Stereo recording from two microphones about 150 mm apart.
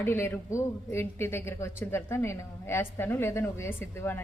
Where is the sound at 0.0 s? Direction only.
15° left (ahead or behind).